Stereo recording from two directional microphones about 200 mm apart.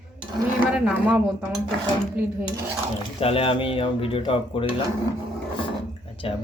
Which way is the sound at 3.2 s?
30° left (ahead or behind).